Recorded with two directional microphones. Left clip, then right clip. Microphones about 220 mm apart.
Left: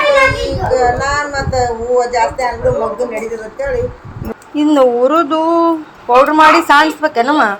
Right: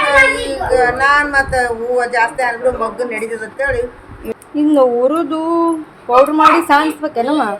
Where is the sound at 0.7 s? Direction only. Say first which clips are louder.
Right 2 dB; 35° right (ahead or behind).